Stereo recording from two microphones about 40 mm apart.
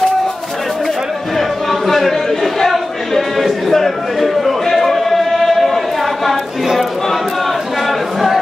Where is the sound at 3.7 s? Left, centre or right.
Centre.